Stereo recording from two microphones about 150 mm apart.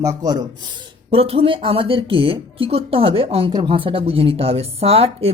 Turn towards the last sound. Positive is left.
turn(degrees=-40)  # may be behind; listen again after turning